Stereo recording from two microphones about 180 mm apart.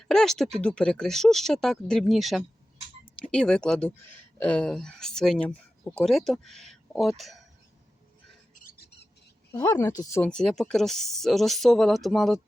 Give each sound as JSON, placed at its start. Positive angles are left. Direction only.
{"t": 0.0, "sound": "speech", "side_deg": 5}
{"t": 8.5, "sound": "a sound", "side_deg": 55}
{"t": 9.5, "sound": "speech", "side_deg": 20}